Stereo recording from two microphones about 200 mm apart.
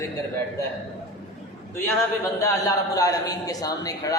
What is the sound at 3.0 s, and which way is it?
A man's voice, 15° left (ahead or behind).